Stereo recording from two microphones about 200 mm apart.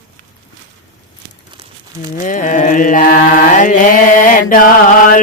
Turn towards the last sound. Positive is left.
turn(degrees=40)  # may be behind; listen again after turning